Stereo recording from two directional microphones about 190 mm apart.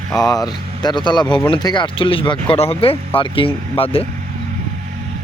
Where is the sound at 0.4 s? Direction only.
20° left (ahead or behind).